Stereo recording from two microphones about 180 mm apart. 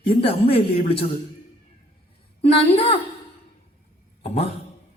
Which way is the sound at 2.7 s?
30° left (ahead or behind).